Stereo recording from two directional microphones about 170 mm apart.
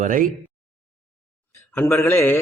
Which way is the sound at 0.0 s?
50° right (ahead or behind).